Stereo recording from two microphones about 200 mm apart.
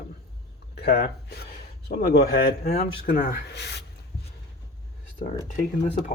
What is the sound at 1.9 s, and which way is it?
Speech, 40° left (ahead or behind).